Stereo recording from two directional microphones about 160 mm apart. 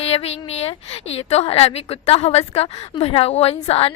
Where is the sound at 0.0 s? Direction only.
40° left (ahead or behind).